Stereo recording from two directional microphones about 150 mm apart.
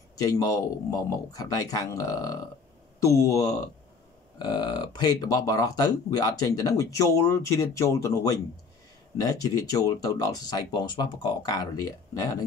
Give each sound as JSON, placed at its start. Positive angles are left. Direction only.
{"t": 0.1, "sound": "speech", "side_deg": 25}
{"t": 9.2, "sound": "speech", "side_deg": 25}